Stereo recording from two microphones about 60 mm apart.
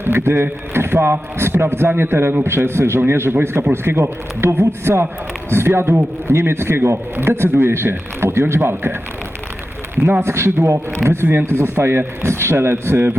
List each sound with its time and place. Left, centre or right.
0.0 s a man's voice: right
10.1 s a man's voice: right